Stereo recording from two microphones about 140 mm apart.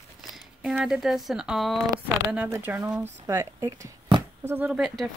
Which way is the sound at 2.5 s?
15° right (ahead or behind).